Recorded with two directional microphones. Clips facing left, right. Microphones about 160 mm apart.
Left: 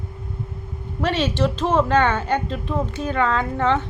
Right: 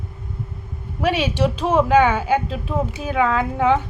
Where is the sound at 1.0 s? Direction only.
10° right (ahead or behind).